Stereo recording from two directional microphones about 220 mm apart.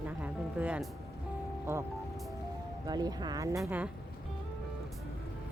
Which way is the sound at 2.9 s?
20° right (ahead or behind).